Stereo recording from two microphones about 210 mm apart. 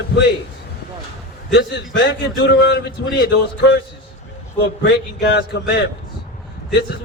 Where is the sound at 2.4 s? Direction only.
50° left (ahead or behind).